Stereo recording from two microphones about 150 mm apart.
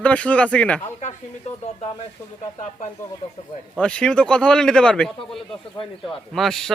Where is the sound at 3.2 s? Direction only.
35° left (ahead or behind).